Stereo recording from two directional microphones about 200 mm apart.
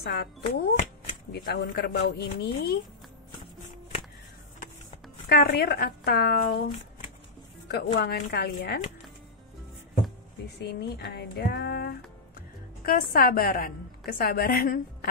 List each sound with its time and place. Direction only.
0.0 s a woman's voice: 55° left (ahead or behind)
5.3 s a woman's voice: 55° left (ahead or behind)
7.6 s a woman's voice: 60° left (ahead or behind)
10.6 s a woman's voice: 55° left (ahead or behind)